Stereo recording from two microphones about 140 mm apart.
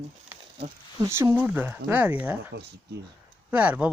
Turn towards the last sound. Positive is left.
turn(degrees=-10)  # may be behind; listen again after turning